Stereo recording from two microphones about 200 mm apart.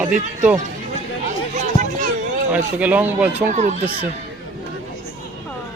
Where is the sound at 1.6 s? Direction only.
40° right (ahead or behind).